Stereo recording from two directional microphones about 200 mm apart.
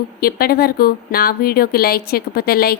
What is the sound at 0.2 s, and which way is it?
Speech, 50° left (ahead or behind).